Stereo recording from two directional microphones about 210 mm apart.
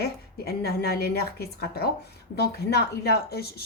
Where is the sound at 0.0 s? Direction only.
50° left (ahead or behind).